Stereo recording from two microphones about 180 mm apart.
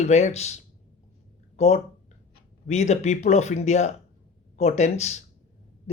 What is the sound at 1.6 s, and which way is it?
Speech, 35° left (ahead or behind).